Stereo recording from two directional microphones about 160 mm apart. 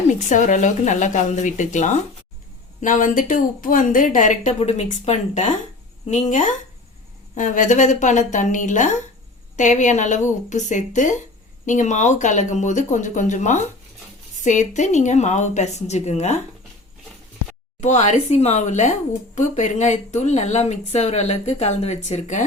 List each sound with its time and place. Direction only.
0.1 s speech: 50° left (ahead or behind)
17.7 s speech: 45° left (ahead or behind)